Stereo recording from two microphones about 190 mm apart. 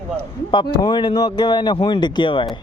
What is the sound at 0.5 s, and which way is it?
Speech, 25° left (ahead or behind).